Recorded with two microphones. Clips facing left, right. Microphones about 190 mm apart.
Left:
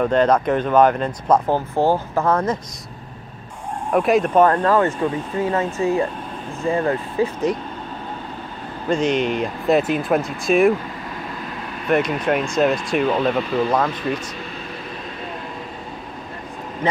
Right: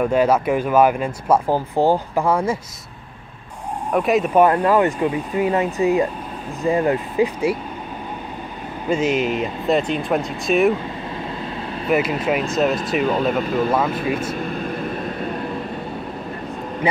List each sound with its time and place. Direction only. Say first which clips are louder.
0.0 s speech: even; 10° right (ahead or behind)
3.9 s speech: left 1 dB; centre (ahead or behind)
8.8 s speech: even; 5° right (ahead or behind)
11.9 s speech: even; 5° right (ahead or behind)
14.3 s air conditioning: right 7 dB; 50° right (ahead or behind)